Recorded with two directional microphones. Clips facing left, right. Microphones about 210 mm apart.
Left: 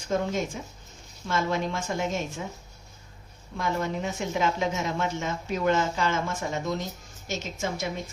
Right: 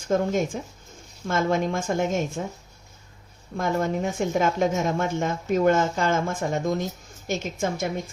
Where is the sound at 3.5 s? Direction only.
50° right (ahead or behind).